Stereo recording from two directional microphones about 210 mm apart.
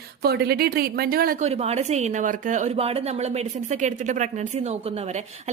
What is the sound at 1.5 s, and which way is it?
A woman's voice, 30° right (ahead or behind).